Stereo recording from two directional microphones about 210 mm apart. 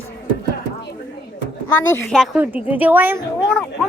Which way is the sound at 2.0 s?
Centre (ahead or behind).